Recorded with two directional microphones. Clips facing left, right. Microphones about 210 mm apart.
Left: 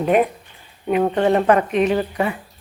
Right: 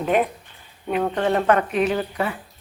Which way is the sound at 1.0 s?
15° left (ahead or behind).